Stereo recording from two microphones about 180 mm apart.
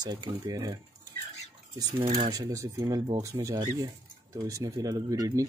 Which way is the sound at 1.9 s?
30° right (ahead or behind).